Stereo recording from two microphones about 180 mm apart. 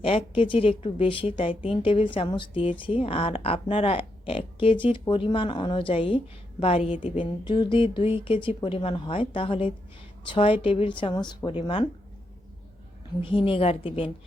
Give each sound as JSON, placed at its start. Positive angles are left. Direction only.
{"t": 0.0, "sound": "speech", "side_deg": 30}
{"t": 13.2, "sound": "speech", "side_deg": 30}